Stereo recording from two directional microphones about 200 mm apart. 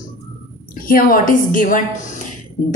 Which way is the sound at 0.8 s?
45° left (ahead or behind).